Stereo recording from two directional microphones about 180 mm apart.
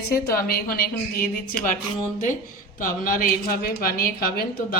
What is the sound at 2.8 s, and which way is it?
Speech, 50° left (ahead or behind).